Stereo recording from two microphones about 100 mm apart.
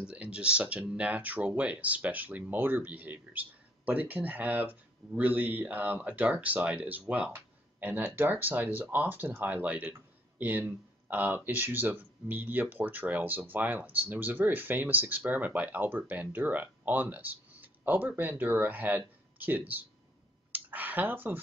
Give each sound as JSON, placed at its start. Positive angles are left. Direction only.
{"t": 0.0, "sound": "speech", "side_deg": -10}